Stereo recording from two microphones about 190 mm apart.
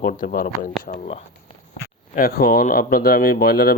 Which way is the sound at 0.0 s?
45° left (ahead or behind).